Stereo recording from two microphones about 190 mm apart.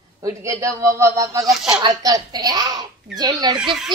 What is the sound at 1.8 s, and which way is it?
A child's voice, 20° right (ahead or behind).